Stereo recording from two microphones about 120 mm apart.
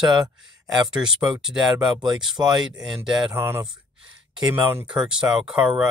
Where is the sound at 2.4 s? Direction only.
20° right (ahead or behind).